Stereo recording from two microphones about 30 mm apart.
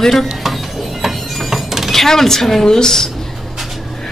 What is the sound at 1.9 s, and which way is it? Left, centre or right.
Speech, centre.